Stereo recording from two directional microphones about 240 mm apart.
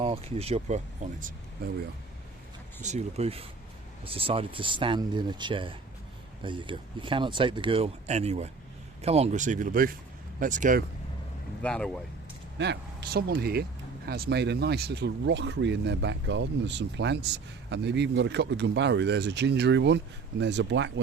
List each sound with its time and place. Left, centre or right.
0.0 s speech: right
2.8 s speech: right
11.6 s speech: centre
12.5 s speech: right